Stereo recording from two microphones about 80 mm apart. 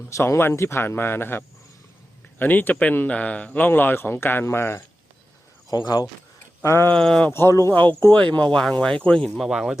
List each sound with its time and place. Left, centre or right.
0.1 s speech: left; by 3.7 s centre
3.7 s speech: left
5.7 s speech: left
6.6 s a sound: left
6.9 s speech: centre
7.3 s speech: left; by 9.7 s centre